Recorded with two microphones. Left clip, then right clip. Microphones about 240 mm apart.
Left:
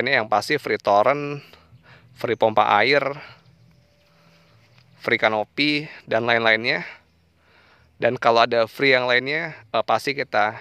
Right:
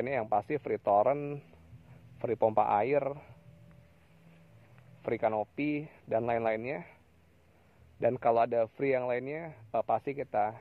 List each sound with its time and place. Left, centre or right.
0.0 s speech: left
5.0 s speech: left
8.0 s speech: left